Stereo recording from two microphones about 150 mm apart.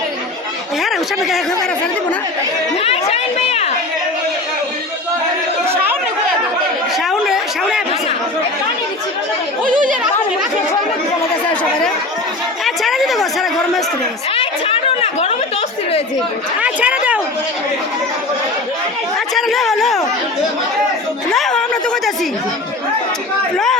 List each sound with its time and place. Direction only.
0.8 s a sound: centre (ahead or behind)
2.8 s a woman's voice: 45° left (ahead or behind)
5.6 s chatter: 15° right (ahead or behind)
6.9 s a sound: centre (ahead or behind)
9.6 s speech: 60° right (ahead or behind)
12.6 s speech: centre (ahead or behind)
14.3 s a sound: 40° left (ahead or behind)
16.6 s speech: 10° right (ahead or behind)
19.3 s speech: centre (ahead or behind)
21.3 s speech: 5° left (ahead or behind)